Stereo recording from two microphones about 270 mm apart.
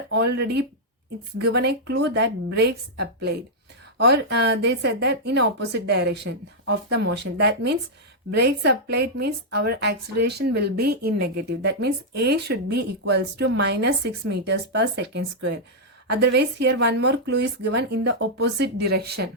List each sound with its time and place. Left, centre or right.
0.1 s speech: right